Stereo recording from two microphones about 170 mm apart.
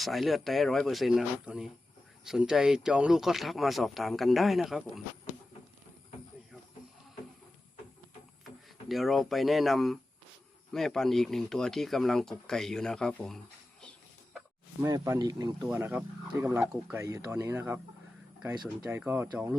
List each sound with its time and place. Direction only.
0.0 s speech: centre (ahead or behind)
8.9 s speech: centre (ahead or behind)
14.8 s speech: 20° right (ahead or behind)
15.6 s speech: 10° right (ahead or behind)
18.8 s speech: 10° right (ahead or behind)